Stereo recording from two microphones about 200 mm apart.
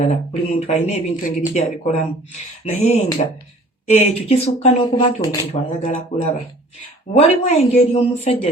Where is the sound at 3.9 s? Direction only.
30° left (ahead or behind).